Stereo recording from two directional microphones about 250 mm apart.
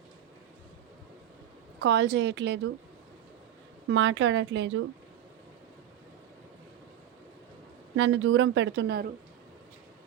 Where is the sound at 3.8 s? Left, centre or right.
Right.